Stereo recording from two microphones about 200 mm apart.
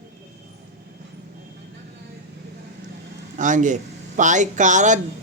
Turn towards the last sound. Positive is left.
turn(degrees=-40)  # may be behind; listen again after turning